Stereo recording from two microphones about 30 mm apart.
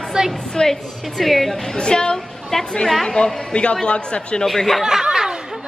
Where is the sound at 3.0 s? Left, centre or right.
Left.